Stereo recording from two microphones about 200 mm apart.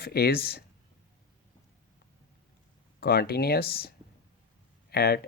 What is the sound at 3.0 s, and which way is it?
Speech, 50° left (ahead or behind).